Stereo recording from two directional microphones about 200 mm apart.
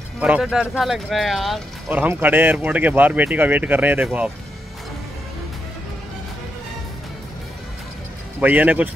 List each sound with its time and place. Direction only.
0.2 s speech: 5° right (ahead or behind)
8.4 s speech: 10° right (ahead or behind)